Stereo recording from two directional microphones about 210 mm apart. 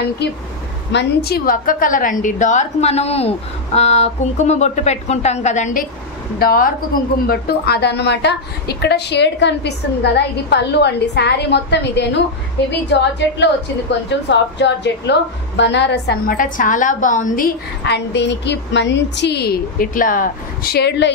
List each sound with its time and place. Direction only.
0.9 s a woman's voice: 50° left (ahead or behind)
17.8 s a woman's voice: 55° left (ahead or behind)